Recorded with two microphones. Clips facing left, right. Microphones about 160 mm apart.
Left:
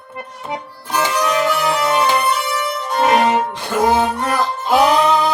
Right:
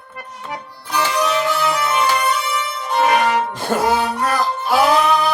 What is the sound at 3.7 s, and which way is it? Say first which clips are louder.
Music: left 2 dB; 50° right (ahead or behind).